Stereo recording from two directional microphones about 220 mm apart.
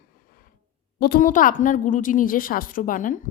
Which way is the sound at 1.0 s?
40° left (ahead or behind).